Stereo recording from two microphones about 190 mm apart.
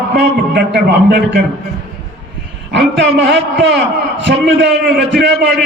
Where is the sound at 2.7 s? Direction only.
65° right (ahead or behind).